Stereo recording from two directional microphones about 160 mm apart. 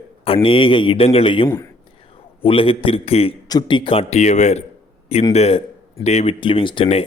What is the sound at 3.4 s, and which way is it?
A man's voice, 25° left (ahead or behind).